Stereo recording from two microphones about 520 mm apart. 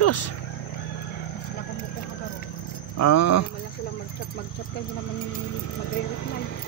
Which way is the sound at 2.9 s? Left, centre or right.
Left.